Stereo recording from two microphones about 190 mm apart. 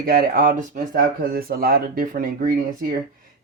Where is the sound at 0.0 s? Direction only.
50° right (ahead or behind).